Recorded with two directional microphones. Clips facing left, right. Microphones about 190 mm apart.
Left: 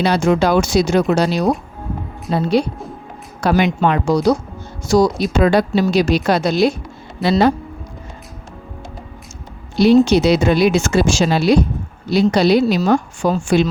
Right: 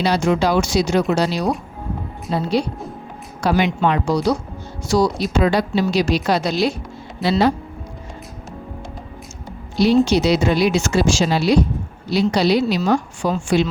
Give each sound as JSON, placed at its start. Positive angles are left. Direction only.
{"t": 0.0, "sound": "a woman's voice", "side_deg": 55}
{"t": 9.7, "sound": "a woman's voice", "side_deg": 55}